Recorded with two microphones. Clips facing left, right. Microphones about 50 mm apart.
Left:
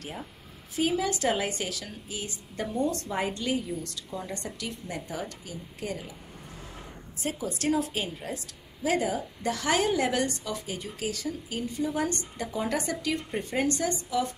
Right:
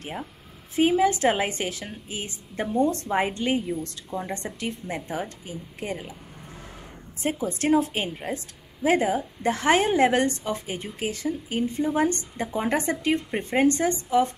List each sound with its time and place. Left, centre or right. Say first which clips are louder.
0.7 s a woman's voice: right 7 dB; right
7.2 s a woman's voice: right 5 dB; right